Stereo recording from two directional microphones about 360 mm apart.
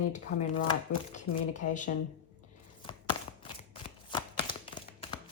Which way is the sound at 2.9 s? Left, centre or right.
Centre.